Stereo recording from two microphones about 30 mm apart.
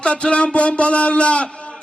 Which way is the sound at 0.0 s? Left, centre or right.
Left.